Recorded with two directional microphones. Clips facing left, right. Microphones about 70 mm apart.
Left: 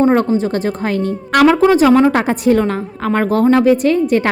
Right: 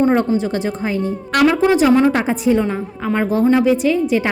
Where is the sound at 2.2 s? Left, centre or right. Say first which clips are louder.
Left 3 dB; left.